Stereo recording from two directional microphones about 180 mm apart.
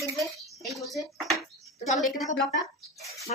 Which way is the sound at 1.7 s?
45° left (ahead or behind).